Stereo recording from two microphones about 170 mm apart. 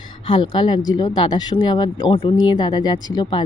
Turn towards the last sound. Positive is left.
turn(degrees=25)  # may be behind; listen again after turning